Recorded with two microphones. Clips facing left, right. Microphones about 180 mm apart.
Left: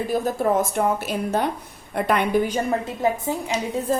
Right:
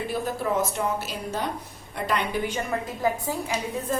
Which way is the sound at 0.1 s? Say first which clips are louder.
Left 7 dB; 50° left (ahead or behind).